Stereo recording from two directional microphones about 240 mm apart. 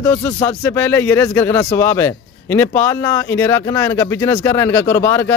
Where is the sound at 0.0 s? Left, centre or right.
Centre.